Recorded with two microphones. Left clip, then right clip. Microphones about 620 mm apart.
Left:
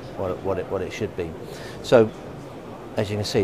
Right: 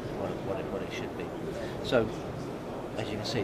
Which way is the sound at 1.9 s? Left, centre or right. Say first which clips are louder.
Left 12 dB; left.